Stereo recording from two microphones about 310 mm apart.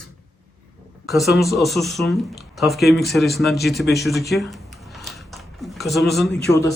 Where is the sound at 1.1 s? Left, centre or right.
Centre.